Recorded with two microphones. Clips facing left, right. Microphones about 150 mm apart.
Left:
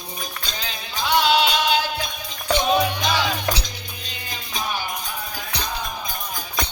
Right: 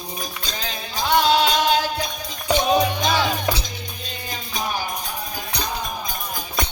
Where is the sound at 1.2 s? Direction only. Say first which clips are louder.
Right 1 dB; 45° right (ahead or behind).